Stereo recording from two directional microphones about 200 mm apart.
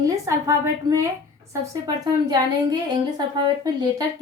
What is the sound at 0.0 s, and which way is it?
A woman's voice, 15° right (ahead or behind).